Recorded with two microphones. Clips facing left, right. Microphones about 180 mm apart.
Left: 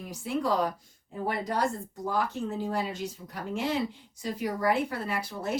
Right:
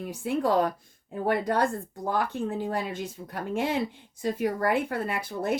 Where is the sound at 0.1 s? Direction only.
55° right (ahead or behind).